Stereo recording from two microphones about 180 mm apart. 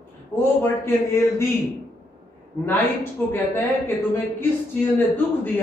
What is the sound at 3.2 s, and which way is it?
Speech, 10° left (ahead or behind).